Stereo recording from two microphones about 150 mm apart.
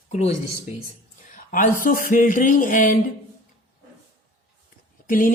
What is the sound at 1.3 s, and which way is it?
Speech, 65° left (ahead or behind).